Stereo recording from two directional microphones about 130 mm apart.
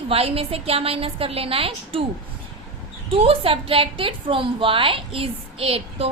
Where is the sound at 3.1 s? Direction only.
45° right (ahead or behind).